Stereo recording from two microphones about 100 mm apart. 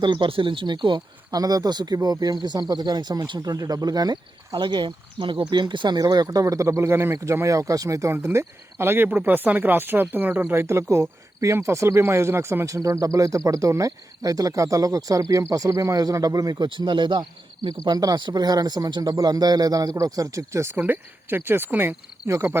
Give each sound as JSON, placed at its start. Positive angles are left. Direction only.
{"t": 0.0, "sound": "speech", "side_deg": -60}
{"t": 16.6, "sound": "speech", "side_deg": -50}